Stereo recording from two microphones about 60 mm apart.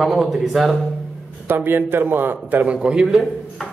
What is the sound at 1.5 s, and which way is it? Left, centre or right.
A man's voice, right.